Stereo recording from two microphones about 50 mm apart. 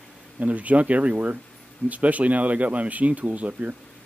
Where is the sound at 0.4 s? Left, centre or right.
Right.